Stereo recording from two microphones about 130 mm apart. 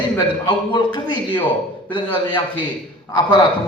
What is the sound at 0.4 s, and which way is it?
Speech, 35° left (ahead or behind).